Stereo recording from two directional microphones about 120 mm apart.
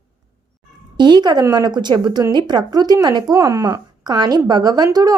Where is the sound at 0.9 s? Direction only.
35° right (ahead or behind).